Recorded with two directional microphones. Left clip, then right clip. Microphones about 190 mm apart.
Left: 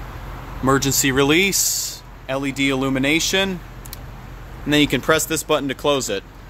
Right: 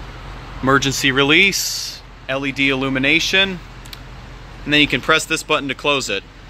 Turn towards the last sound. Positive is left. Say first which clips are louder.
# right 1 dB
turn(degrees=15)  # may be behind; listen again after turning